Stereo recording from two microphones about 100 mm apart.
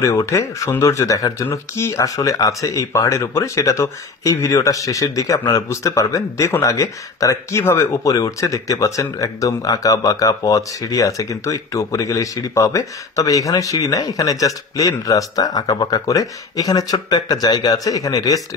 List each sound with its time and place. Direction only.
0.0 s speech: 35° left (ahead or behind)